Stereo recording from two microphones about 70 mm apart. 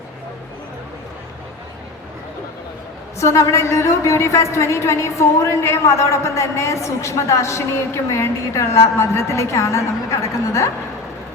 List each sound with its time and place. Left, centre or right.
3.2 s a woman's voice: left